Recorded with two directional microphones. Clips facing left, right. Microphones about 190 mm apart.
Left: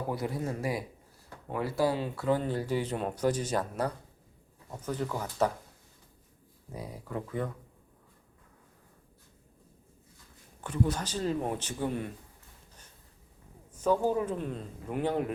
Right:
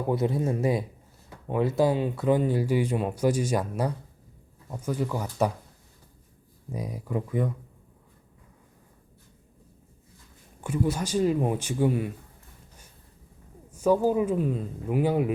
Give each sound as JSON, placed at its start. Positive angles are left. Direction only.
{"t": 0.1, "sound": "speech", "side_deg": -25}
{"t": 6.7, "sound": "speech", "side_deg": -15}
{"t": 10.6, "sound": "speech", "side_deg": -10}
{"t": 13.7, "sound": "speech", "side_deg": -10}